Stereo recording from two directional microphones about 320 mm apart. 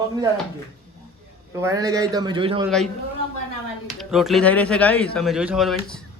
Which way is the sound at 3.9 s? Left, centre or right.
Centre.